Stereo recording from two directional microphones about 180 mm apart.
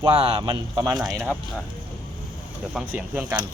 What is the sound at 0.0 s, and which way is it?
Speech, 30° right (ahead or behind).